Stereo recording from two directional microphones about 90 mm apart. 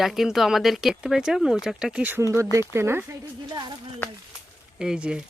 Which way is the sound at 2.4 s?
30° right (ahead or behind).